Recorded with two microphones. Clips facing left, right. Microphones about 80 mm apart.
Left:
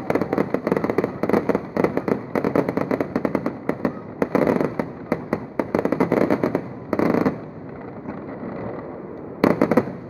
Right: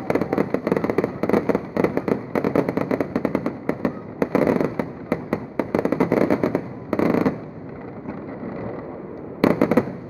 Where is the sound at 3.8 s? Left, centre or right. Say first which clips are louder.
Even; centre.